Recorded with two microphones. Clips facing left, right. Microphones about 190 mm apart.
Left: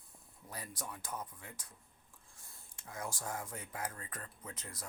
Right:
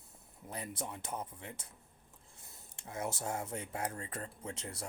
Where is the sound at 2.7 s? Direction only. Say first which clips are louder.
Right 5 dB; 25° right (ahead or behind).